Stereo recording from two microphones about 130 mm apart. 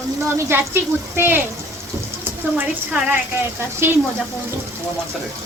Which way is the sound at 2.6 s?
10° right (ahead or behind).